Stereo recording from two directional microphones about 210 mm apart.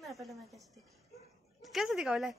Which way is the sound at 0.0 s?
Centre (ahead or behind).